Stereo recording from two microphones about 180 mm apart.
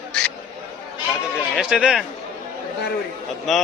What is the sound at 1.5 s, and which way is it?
Speech, 5° right (ahead or behind).